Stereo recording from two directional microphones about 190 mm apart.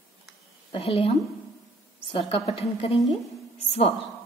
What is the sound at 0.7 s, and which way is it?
Speech, 30° left (ahead or behind).